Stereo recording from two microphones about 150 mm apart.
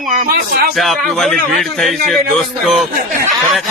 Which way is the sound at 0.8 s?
Centre (ahead or behind).